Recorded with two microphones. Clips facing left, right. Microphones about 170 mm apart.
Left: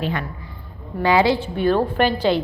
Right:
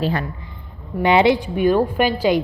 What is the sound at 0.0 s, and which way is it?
Speech, 35° right (ahead or behind).